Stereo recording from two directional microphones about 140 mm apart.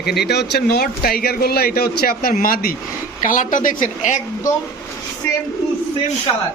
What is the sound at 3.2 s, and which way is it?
Speech, 65° left (ahead or behind).